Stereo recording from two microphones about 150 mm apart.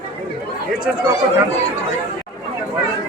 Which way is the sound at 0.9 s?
5° right (ahead or behind).